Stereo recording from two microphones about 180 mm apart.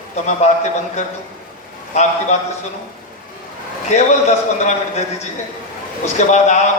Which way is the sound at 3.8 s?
40° left (ahead or behind).